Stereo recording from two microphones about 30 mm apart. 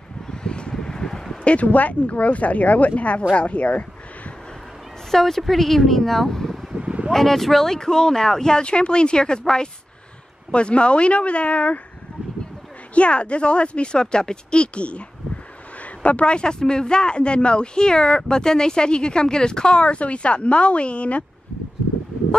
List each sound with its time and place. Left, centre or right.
0.3 s a sound: left
1.4 s speech: left
5.1 s speech: centre
6.8 s a sound: right
7.1 s speech: centre
8.6 s speech: left
10.5 s speech: left
12.9 s speech: left
19.7 s speech: left